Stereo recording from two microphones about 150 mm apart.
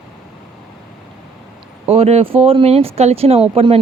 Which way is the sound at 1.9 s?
40° right (ahead or behind).